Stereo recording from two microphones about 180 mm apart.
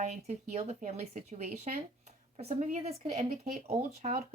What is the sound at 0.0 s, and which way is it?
Speech, 40° right (ahead or behind).